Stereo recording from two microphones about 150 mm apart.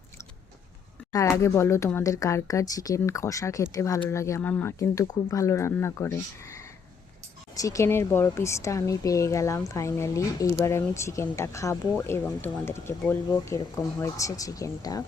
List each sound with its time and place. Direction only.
1.1 s speech: 20° left (ahead or behind)
7.5 s speech: 20° left (ahead or behind)